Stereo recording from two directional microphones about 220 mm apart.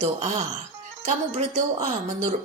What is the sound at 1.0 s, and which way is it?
Speech, 30° right (ahead or behind).